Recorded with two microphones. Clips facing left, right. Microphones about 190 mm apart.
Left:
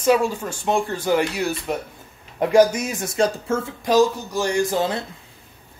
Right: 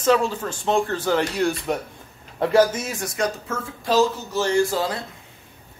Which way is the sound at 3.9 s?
15° left (ahead or behind).